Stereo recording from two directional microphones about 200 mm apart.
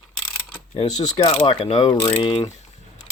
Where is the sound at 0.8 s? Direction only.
35° left (ahead or behind).